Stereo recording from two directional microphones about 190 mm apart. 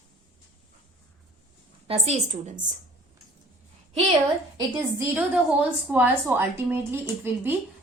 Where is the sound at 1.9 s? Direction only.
35° right (ahead or behind).